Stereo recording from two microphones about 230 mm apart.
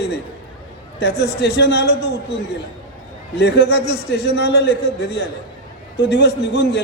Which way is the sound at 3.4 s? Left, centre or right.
Left.